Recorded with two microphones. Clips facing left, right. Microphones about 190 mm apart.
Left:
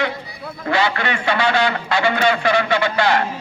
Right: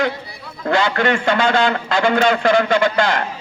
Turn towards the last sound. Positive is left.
turn(degrees=-50)  # may be behind; listen again after turning